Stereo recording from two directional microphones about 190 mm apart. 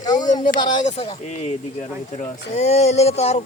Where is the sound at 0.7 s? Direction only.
35° left (ahead or behind).